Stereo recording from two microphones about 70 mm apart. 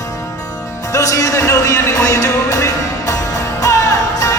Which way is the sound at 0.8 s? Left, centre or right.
Left.